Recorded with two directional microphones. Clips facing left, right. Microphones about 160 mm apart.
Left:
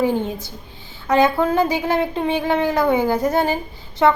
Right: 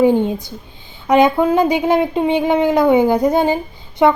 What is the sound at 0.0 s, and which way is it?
Speech, 15° right (ahead or behind).